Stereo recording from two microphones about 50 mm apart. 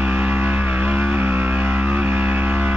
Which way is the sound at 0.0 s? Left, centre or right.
Right.